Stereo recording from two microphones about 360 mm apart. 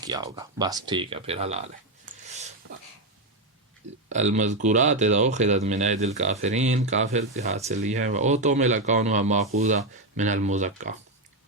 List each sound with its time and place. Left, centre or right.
0.0 s speech: centre
2.1 s a sound: right
4.1 s speech: centre